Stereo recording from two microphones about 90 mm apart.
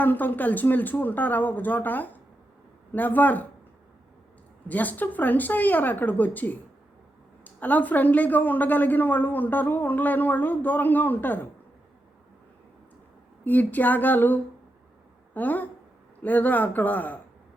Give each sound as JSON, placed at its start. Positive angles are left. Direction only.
{"t": 0.0, "sound": "a woman's voice", "side_deg": 20}
{"t": 4.7, "sound": "a woman's voice", "side_deg": 20}
{"t": 13.4, "sound": "a woman's voice", "side_deg": 20}